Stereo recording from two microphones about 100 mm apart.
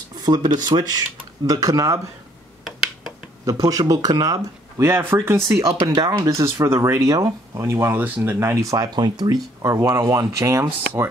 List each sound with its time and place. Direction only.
0.1 s speech: 45° right (ahead or behind)
3.6 s speech: 40° right (ahead or behind)
5.2 s speech: 30° right (ahead or behind)
5.8 s speech: 40° right (ahead or behind)